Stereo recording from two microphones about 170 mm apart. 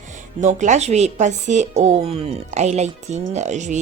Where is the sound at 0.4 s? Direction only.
45° right (ahead or behind).